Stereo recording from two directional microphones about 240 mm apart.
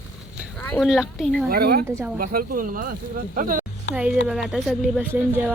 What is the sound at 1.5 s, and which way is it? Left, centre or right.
Speech, right.